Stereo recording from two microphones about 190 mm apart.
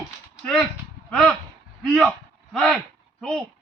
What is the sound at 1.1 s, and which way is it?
Speech, 5° left (ahead or behind).